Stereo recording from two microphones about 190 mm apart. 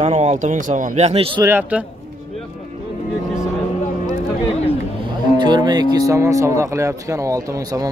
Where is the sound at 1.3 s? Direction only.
10° right (ahead or behind).